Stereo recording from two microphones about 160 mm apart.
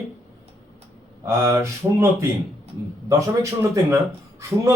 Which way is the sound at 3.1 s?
20° right (ahead or behind).